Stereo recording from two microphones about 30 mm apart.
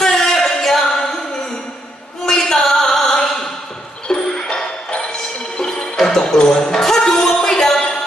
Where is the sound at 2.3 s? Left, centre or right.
Left.